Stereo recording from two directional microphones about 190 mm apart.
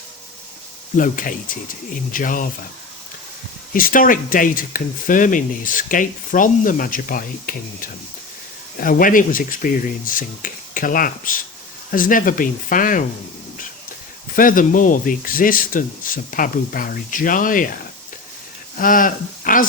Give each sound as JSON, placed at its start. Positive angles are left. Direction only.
{"t": 0.9, "sound": "speech", "side_deg": 45}
{"t": 3.7, "sound": "speech", "side_deg": 45}
{"t": 14.3, "sound": "speech", "side_deg": 45}
{"t": 18.8, "sound": "speech", "side_deg": 45}